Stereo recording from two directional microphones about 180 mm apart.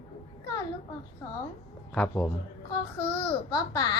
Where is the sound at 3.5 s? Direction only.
20° left (ahead or behind).